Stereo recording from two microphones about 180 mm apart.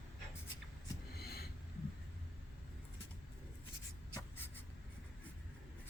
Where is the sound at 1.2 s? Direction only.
60° left (ahead or behind).